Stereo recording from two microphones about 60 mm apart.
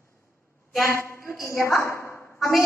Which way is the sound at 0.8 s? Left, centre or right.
Left.